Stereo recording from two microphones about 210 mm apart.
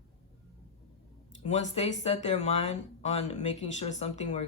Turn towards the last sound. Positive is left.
turn(degrees=35)  # may be behind; listen again after turning